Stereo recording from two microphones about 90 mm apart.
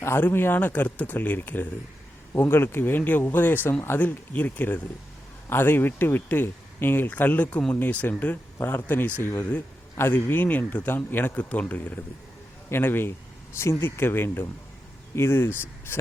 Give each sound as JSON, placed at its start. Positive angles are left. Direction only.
{"t": 0.0, "sound": "speech", "side_deg": 25}